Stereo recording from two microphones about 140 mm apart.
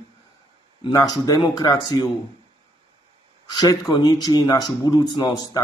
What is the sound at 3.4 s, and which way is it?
Speech, 30° left (ahead or behind).